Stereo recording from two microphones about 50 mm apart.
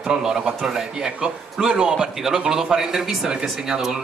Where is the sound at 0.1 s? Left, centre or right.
Centre.